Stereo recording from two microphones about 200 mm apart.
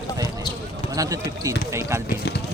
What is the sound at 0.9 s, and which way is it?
Speech, 15° right (ahead or behind).